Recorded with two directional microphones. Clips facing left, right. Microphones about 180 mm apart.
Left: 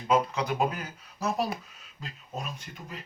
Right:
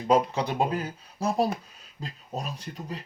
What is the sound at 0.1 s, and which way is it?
Speech, 30° right (ahead or behind).